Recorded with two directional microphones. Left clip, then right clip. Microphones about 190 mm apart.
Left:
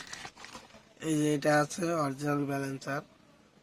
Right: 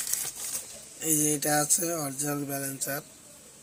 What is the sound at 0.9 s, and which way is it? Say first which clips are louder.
Speech: right 1 dB; 25° left (ahead or behind).